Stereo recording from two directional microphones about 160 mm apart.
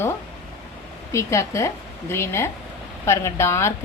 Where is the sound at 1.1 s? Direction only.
20° left (ahead or behind).